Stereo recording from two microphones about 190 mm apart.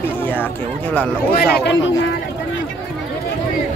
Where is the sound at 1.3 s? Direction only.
55° left (ahead or behind).